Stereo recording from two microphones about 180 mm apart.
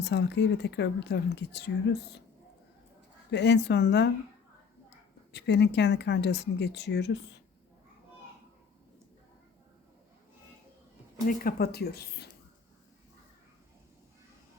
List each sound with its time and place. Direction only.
0.0 s a woman's voice: 70° left (ahead or behind)
3.3 s a woman's voice: 70° left (ahead or behind)
5.3 s a woman's voice: 70° left (ahead or behind)
11.3 s speech: 55° left (ahead or behind)